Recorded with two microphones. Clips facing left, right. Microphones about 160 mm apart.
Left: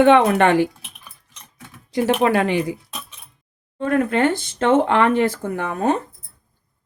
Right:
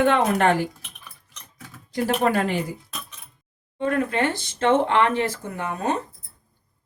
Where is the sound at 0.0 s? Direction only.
80° left.